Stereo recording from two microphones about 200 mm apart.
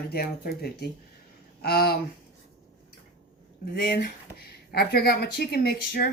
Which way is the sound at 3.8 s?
50° left (ahead or behind).